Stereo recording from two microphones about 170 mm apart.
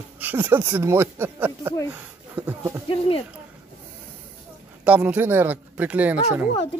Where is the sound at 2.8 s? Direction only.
30° left (ahead or behind).